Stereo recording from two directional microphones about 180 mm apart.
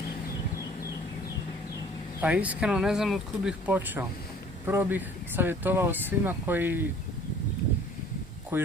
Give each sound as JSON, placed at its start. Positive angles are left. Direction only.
{"t": 2.2, "sound": "speech", "side_deg": -5}